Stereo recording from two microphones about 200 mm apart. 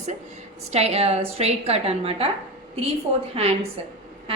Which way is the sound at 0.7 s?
30° right (ahead or behind).